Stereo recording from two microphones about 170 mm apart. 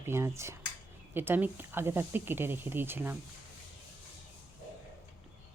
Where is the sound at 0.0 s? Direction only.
15° right (ahead or behind).